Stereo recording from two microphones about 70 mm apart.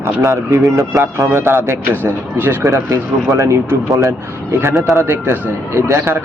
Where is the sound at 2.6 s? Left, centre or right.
Right.